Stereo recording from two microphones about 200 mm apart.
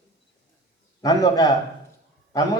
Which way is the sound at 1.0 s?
20° left (ahead or behind).